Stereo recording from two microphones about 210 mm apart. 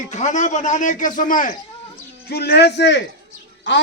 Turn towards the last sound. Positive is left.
turn(degrees=60)  # may be behind; listen again after turning